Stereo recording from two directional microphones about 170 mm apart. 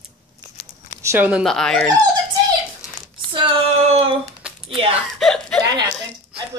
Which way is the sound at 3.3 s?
30° right (ahead or behind).